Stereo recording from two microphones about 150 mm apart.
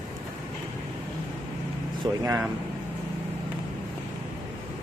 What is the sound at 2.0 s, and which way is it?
Speech, 25° right (ahead or behind).